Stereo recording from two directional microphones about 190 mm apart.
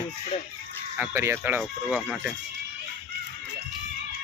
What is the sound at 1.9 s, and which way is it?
Speech, 5° left (ahead or behind).